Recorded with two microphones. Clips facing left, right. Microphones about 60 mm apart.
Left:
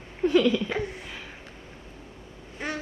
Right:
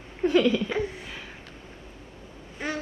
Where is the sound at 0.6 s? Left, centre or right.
Centre.